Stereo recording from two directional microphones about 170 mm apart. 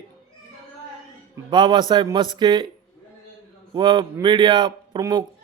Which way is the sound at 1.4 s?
25° right (ahead or behind).